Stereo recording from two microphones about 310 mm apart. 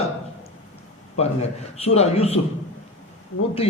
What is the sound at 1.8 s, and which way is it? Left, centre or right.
Speech, centre.